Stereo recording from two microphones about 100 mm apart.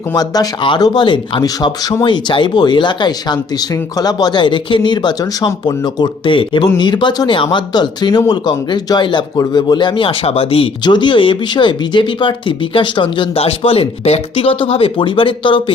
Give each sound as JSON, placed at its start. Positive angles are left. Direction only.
{"t": 0.1, "sound": "speech", "side_deg": 40}
{"t": 10.8, "sound": "speech", "side_deg": 50}